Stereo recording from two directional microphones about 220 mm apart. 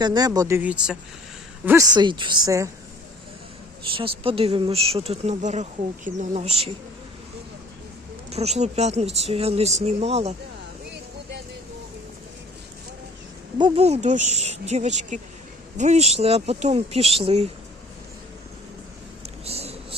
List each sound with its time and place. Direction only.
0.0 s speech: 20° right (ahead or behind)
3.9 s speech: 25° right (ahead or behind)
8.3 s speech: 30° right (ahead or behind)
13.6 s speech: 30° right (ahead or behind)
19.5 s a sound: 25° right (ahead or behind)